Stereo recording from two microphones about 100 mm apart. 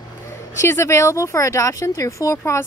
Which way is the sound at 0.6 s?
30° left (ahead or behind).